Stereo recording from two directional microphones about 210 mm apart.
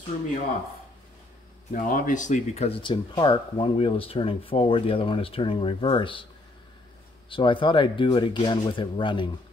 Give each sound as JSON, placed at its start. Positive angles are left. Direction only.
{"t": 1.7, "sound": "speech", "side_deg": 40}
{"t": 7.2, "sound": "speech", "side_deg": 25}